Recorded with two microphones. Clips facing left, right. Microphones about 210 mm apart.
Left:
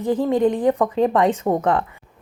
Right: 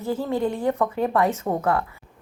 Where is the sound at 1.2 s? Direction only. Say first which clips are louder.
Left 4 dB; 30° left (ahead or behind).